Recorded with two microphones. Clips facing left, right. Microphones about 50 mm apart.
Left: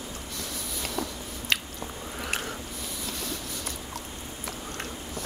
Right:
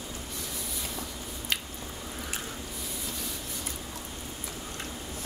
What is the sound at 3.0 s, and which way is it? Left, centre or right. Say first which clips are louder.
Train: left 6 dB; left.